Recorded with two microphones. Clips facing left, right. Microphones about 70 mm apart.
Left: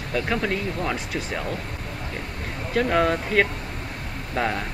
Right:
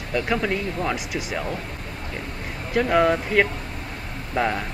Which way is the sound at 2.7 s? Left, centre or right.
Centre.